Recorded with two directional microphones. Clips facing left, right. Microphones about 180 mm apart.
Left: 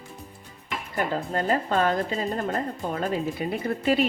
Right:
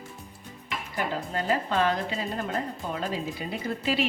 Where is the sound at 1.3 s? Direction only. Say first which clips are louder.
Left 2 dB; 45° left (ahead or behind).